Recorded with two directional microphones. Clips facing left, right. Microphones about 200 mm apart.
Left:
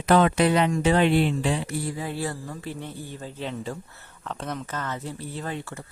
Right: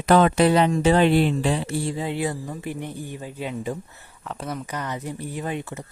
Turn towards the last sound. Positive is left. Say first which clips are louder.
# right 4 dB
turn(degrees=-20)  # may be behind; listen again after turning